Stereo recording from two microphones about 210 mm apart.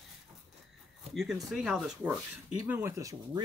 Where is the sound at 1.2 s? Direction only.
Centre (ahead or behind).